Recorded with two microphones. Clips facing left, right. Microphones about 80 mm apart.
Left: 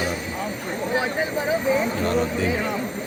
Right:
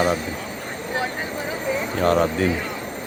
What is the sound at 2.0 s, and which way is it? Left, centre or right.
Speech, right.